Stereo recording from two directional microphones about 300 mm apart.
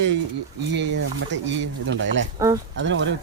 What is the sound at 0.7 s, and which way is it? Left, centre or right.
Speech, right.